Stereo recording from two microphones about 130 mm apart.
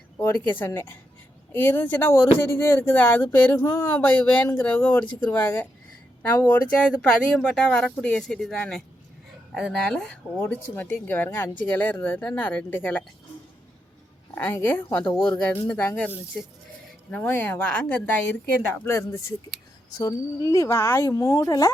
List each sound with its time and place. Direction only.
0.2 s speech: 15° left (ahead or behind)
14.3 s speech: 15° left (ahead or behind)